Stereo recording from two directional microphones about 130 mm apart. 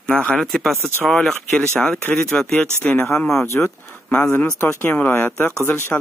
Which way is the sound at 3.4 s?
20° left (ahead or behind).